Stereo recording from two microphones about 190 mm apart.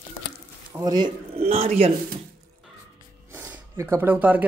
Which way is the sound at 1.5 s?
30° right (ahead or behind).